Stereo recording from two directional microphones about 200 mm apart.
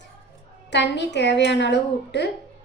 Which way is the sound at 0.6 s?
60° left (ahead or behind).